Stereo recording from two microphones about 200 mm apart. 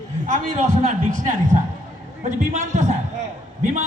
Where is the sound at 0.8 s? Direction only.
40° right (ahead or behind).